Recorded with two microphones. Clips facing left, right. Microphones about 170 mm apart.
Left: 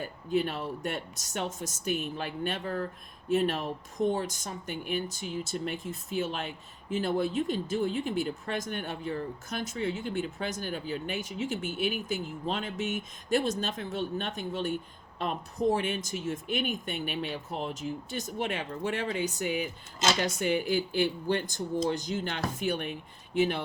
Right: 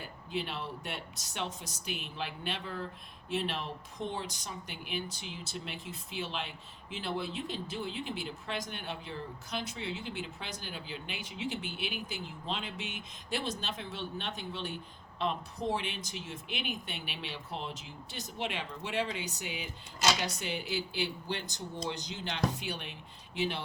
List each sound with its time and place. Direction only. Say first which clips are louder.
0.0 s speech: left 9 dB; 45° left (ahead or behind)